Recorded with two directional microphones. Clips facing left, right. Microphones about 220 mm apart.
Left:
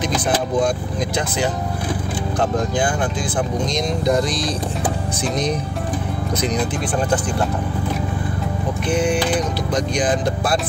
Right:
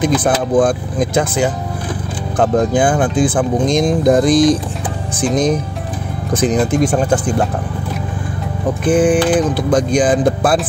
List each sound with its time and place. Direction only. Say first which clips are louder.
0.0 s speech: right 6 dB; 50° right (ahead or behind)
8.8 s speech: right 7 dB; 50° right (ahead or behind)